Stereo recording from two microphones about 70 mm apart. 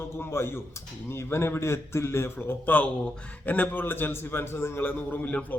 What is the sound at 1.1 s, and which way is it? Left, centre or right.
A man's voice, left.